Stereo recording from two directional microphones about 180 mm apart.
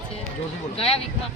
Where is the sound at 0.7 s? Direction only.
30° left (ahead or behind).